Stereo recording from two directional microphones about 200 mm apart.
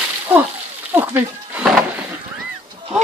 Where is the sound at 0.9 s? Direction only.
10° right (ahead or behind).